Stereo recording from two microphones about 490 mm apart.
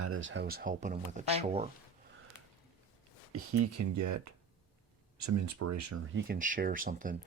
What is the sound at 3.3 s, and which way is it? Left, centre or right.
Speech, right.